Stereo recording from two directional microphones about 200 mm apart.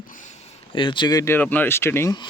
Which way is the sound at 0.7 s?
25° left (ahead or behind).